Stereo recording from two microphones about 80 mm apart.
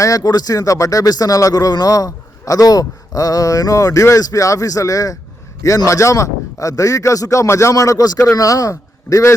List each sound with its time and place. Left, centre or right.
0.0 s speech: left